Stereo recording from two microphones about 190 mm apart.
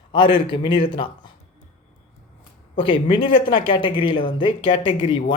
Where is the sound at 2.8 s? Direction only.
25° left (ahead or behind).